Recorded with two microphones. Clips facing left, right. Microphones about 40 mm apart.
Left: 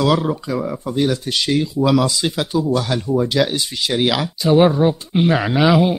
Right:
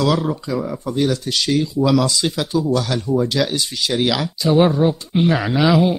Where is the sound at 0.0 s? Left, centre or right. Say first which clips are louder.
Left 1 dB; centre.